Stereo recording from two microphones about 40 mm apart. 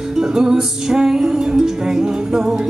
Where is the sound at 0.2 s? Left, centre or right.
Centre.